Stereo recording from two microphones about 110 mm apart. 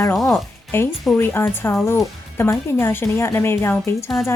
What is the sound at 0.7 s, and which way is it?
Speech, 20° left (ahead or behind).